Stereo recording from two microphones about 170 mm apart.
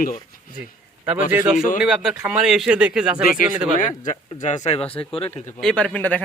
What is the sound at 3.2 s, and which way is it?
Speech, 50° left (ahead or behind).